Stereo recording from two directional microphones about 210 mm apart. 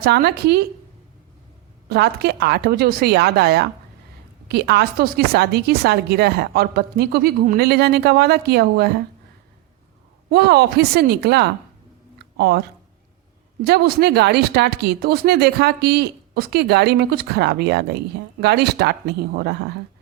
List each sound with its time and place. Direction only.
0.0 s speech: 50° right (ahead or behind)
1.9 s speech: 50° right (ahead or behind)
10.2 s speech: 50° right (ahead or behind)
12.2 s a sound: 50° right (ahead or behind)
13.7 s speech: 50° right (ahead or behind)